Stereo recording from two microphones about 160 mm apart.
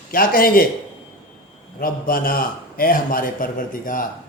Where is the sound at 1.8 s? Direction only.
65° left (ahead or behind).